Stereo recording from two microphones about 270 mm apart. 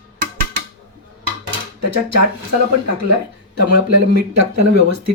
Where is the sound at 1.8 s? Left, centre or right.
Right.